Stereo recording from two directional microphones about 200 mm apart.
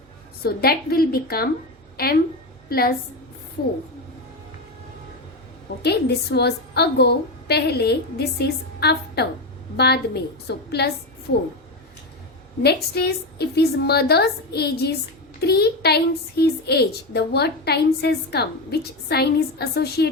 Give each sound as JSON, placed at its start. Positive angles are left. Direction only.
{"t": 0.4, "sound": "a woman's voice", "side_deg": 50}
{"t": 5.8, "sound": "a woman's voice", "side_deg": 55}
{"t": 12.6, "sound": "a woman's voice", "side_deg": 55}